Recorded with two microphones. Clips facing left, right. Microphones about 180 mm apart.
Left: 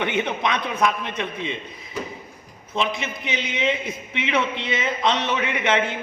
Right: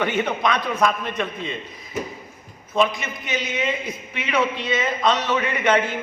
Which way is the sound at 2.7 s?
25° left (ahead or behind).